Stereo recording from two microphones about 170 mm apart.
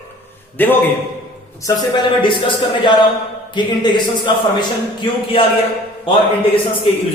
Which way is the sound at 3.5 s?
25° left (ahead or behind).